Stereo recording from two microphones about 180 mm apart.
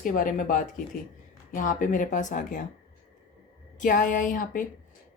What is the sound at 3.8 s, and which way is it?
Speech, 45° left (ahead or behind).